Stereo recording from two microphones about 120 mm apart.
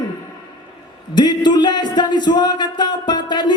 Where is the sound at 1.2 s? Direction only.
40° left (ahead or behind).